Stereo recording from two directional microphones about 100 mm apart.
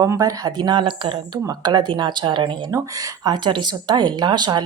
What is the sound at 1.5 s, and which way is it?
A woman's voice, 45° right (ahead or behind).